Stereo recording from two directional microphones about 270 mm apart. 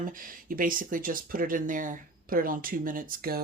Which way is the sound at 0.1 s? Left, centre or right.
Right.